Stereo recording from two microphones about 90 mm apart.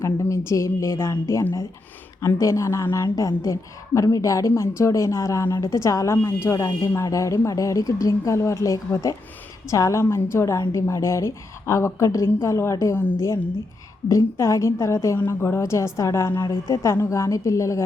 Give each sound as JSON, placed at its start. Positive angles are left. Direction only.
{"t": 0.0, "sound": "a woman's voice", "side_deg": 35}